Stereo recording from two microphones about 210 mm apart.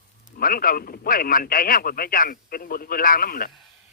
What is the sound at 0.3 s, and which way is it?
Speech, 45° left (ahead or behind).